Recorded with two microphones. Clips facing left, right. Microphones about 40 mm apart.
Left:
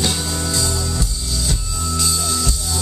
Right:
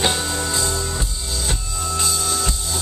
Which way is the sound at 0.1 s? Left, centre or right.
Centre.